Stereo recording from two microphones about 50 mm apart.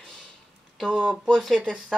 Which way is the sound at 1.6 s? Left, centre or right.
Centre.